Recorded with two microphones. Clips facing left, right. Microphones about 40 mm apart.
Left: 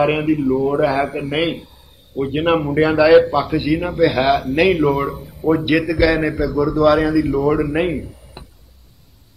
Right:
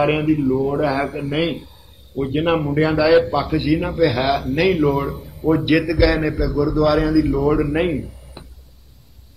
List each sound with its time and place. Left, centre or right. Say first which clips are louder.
0.0 s a man's voice: left 1 dB; centre
7.2 s speech: left 1 dB; centre